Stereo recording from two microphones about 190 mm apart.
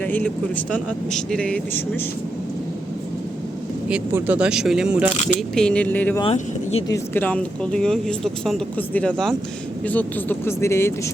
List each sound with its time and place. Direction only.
0.0 s speech: 10° left (ahead or behind)
3.8 s speech: 5° right (ahead or behind); by 6.2 s 10° left (ahead or behind)
6.2 s speech: 35° left (ahead or behind)
6.8 s speech: 15° left (ahead or behind)